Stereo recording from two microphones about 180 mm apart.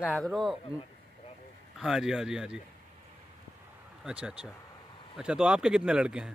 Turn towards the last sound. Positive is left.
turn(degrees=-5)  # may be behind; listen again after turning